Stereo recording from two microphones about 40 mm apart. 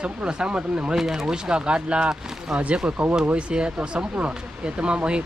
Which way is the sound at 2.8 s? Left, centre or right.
Right.